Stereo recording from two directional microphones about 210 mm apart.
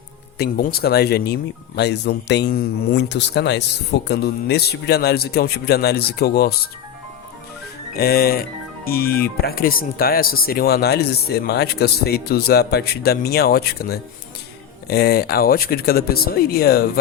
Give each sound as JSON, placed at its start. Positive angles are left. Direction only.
{"t": 0.3, "sound": "speech", "side_deg": 45}
{"t": 7.9, "sound": "speech", "side_deg": 50}